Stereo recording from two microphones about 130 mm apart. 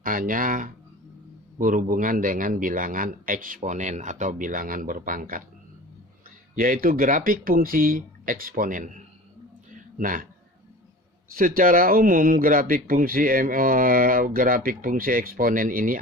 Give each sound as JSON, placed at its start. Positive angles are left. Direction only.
{"t": 0.0, "sound": "speech", "side_deg": -90}
{"t": 6.6, "sound": "speech", "side_deg": -90}
{"t": 10.0, "sound": "speech", "side_deg": -90}
{"t": 11.3, "sound": "speech", "side_deg": -90}